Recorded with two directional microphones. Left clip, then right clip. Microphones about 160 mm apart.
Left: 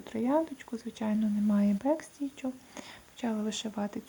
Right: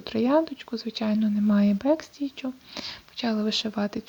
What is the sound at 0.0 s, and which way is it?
Speech, 25° right (ahead or behind).